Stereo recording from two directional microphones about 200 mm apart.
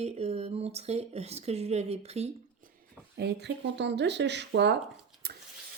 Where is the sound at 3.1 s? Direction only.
55° right (ahead or behind).